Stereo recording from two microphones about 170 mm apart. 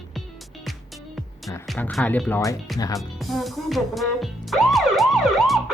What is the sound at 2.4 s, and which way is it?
Speech, 20° left (ahead or behind).